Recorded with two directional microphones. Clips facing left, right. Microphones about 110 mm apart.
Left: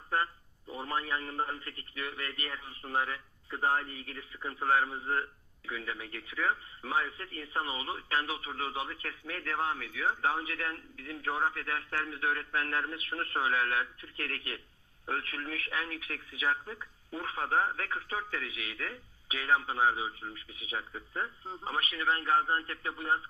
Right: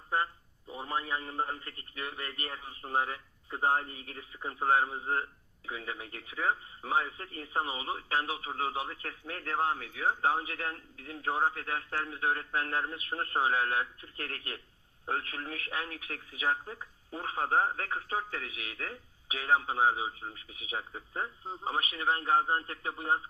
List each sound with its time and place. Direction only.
0.1 s speech: 15° right (ahead or behind)